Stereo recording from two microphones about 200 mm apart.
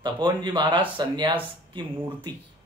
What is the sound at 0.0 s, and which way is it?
Speech, 20° right (ahead or behind).